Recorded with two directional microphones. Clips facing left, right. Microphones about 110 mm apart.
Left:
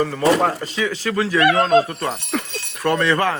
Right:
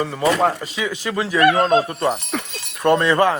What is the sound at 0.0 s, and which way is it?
Speech, 5° right (ahead or behind).